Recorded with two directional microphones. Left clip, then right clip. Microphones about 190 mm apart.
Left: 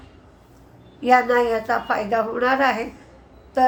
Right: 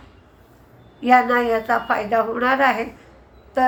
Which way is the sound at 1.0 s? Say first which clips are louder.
Right 1 dB; 10° left (ahead or behind).